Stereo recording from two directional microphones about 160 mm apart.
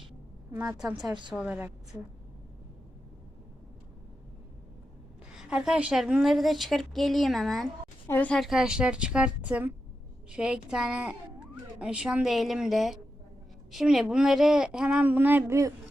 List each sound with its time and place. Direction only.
0.5 s a woman's voice: 5° right (ahead or behind)
1.0 s a woman's voice: 30° right (ahead or behind)
1.3 s a woman's voice: 5° right (ahead or behind)
5.3 s a woman's voice: 5° right (ahead or behind)